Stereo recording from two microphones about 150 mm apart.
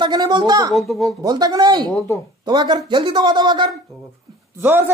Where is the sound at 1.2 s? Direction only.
25° right (ahead or behind).